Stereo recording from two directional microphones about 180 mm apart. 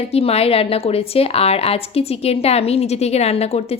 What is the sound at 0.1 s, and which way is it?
Speech, 35° left (ahead or behind).